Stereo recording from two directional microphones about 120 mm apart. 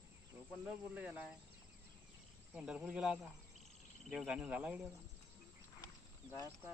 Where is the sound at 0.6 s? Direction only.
10° right (ahead or behind).